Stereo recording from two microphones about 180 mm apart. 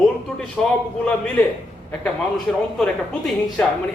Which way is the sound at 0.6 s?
5° left (ahead or behind).